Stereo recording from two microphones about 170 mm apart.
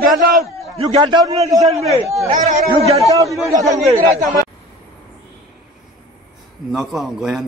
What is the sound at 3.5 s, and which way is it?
Speech, 20° right (ahead or behind).